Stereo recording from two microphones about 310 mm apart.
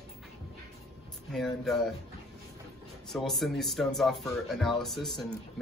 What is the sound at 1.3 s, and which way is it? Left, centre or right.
Speech, centre.